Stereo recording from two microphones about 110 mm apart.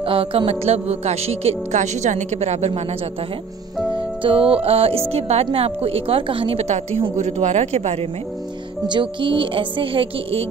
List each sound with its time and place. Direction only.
0.0 s speech: 55° right (ahead or behind); by 3.0 s 75° right (ahead or behind)
3.9 s speech: 55° right (ahead or behind); by 6.8 s 70° right (ahead or behind)
7.2 s speech: 85° right
8.8 s speech: 45° right (ahead or behind)